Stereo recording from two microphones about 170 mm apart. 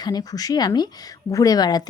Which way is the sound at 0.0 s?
25° left (ahead or behind).